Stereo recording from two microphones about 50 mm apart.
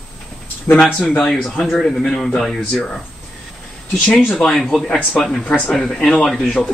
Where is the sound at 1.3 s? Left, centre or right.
Left.